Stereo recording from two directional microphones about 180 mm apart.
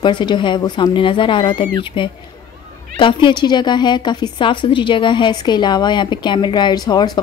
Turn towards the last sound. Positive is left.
turn(degrees=20)  # may be behind; listen again after turning